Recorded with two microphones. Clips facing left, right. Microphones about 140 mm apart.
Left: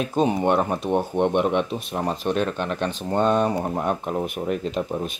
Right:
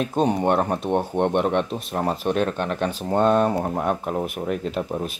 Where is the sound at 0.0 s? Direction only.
Centre (ahead or behind).